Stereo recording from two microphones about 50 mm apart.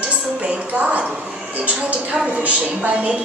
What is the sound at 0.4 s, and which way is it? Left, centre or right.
Music, right.